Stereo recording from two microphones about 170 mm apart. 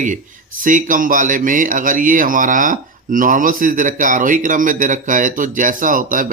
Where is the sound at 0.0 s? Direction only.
50° right (ahead or behind).